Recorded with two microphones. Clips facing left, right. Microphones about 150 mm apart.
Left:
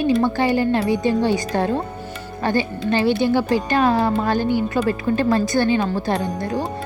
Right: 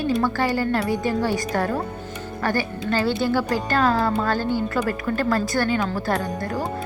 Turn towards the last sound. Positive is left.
turn(degrees=20)  # may be behind; listen again after turning